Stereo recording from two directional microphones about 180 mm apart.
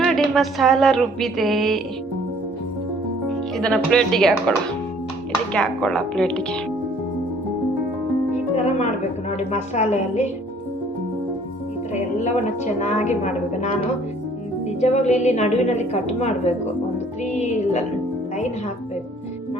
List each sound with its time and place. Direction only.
0.0 s speech: centre (ahead or behind)
3.6 s speech: 5° left (ahead or behind)
5.5 s speech: 5° left (ahead or behind)
8.5 s music: 40° left (ahead or behind)
9.4 s a woman's voice: 40° left (ahead or behind)
11.9 s a woman's voice: 40° left (ahead or behind)
14.8 s a woman's voice: 40° left (ahead or behind)